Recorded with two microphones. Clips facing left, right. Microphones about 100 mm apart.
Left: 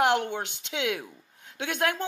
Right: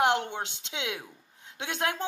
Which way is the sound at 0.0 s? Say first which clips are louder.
Left 2 dB; 25° right (ahead or behind).